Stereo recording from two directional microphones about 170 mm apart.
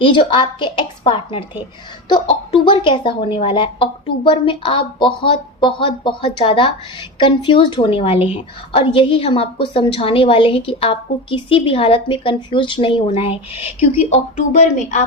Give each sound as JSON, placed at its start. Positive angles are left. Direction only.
{"t": 0.0, "sound": "a woman's voice", "side_deg": 30}